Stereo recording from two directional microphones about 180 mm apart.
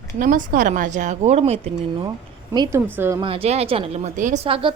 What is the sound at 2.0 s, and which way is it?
Speech, 20° right (ahead or behind).